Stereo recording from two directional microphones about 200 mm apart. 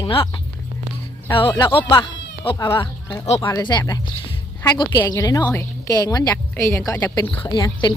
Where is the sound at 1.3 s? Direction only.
25° left (ahead or behind).